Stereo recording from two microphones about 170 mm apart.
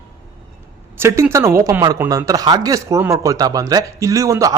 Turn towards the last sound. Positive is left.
turn(degrees=-20)  # may be behind; listen again after turning